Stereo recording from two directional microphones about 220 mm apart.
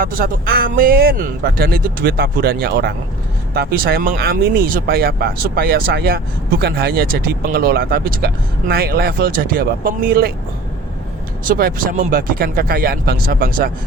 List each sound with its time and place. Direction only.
0.0 s speech: 40° right (ahead or behind)
11.4 s speech: 40° right (ahead or behind)